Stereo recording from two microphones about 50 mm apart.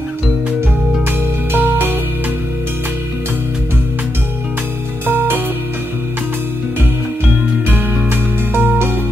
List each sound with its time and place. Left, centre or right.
1.5 s music: right
5.0 s music: right
8.5 s music: right